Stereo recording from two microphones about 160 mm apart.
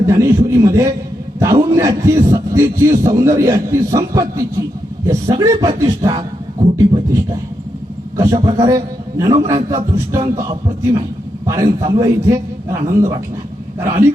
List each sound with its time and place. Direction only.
0.0 s a man's voice: 20° right (ahead or behind)
13.7 s a man's voice: 15° right (ahead or behind)